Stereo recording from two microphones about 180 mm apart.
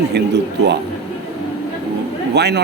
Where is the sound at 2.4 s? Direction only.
65° right (ahead or behind).